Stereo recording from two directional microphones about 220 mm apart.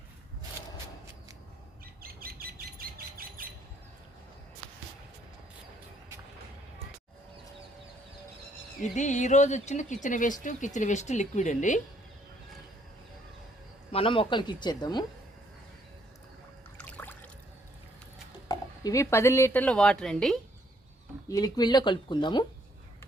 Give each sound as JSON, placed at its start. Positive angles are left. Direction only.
{"t": 2.0, "sound": "bird", "side_deg": -45}
{"t": 8.8, "sound": "speech", "side_deg": 35}
{"t": 13.9, "sound": "speech", "side_deg": 25}
{"t": 16.7, "sound": "a sound", "side_deg": 10}
{"t": 18.4, "sound": "speech", "side_deg": 15}
{"t": 21.2, "sound": "speech", "side_deg": 15}